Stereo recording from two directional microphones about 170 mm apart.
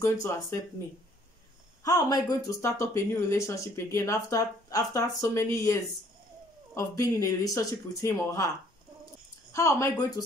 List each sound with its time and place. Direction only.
0.0 s speech: 15° left (ahead or behind)
1.9 s speech: 20° left (ahead or behind)
9.5 s speech: 20° left (ahead or behind)